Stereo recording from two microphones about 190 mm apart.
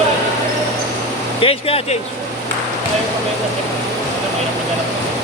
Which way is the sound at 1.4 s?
30° left (ahead or behind).